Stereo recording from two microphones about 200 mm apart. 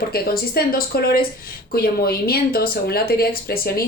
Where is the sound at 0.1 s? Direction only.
50° left (ahead or behind).